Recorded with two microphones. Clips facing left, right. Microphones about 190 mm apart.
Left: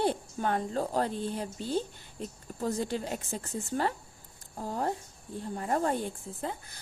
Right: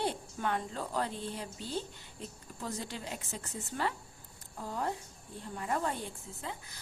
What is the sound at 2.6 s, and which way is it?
A woman's voice, 45° left (ahead or behind).